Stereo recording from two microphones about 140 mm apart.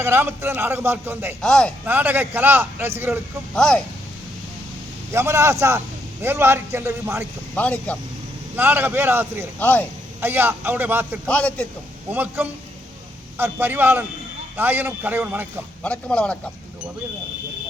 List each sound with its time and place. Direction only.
0.0 s a man's voice: 15° right (ahead or behind)
1.4 s speech: 5° left (ahead or behind)
1.8 s a man's voice: 15° right (ahead or behind)
3.5 s speech: 5° left (ahead or behind)
5.1 s a man's voice: 20° right (ahead or behind)
7.5 s speech: 10° left (ahead or behind)
8.5 s a man's voice: 15° right (ahead or behind)
9.6 s speech: 10° left (ahead or behind)
10.2 s a man's voice: 15° right (ahead or behind)
11.3 s speech: 10° left (ahead or behind)
12.1 s a man's voice: 15° right (ahead or behind)
15.8 s speech: 10° left (ahead or behind)